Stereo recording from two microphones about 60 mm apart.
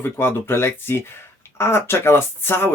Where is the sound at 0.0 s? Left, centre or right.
Left.